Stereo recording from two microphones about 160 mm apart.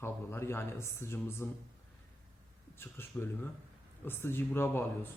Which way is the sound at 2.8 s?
15° left (ahead or behind).